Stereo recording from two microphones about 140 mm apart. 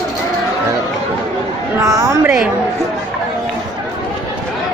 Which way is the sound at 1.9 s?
20° right (ahead or behind).